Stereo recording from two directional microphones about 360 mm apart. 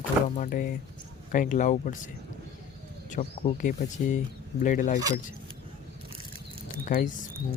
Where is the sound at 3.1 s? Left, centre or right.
Centre.